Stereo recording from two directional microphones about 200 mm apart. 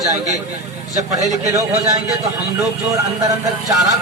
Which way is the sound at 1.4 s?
15° right (ahead or behind).